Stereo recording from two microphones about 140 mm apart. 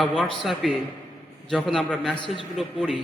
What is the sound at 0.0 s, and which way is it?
A man's voice, 5° left (ahead or behind).